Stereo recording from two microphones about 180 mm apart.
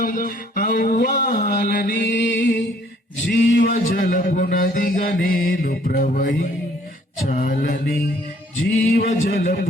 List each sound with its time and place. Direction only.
0.0 s music: 50° left (ahead or behind)
1.5 s mantra: 55° left (ahead or behind)
3.2 s music: 60° left (ahead or behind)
7.3 s a man's voice: 45° left (ahead or behind)
8.6 s music: 60° left (ahead or behind)
9.0 s a man's voice: 50° left (ahead or behind)